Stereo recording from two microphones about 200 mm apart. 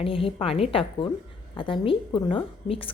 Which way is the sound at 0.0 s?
25° left (ahead or behind).